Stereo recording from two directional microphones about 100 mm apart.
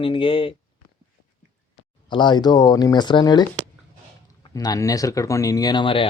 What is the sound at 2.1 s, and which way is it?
Speech, 50° left (ahead or behind).